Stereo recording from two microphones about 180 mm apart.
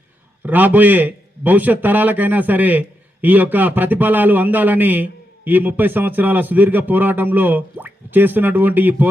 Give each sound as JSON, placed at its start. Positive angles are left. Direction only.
{"t": 0.4, "sound": "a man's voice", "side_deg": -10}